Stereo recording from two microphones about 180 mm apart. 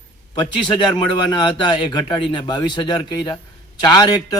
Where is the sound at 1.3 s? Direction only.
25° left (ahead or behind).